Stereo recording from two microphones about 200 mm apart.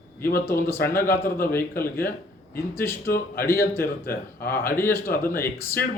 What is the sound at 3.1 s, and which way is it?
Speech, 50° left (ahead or behind).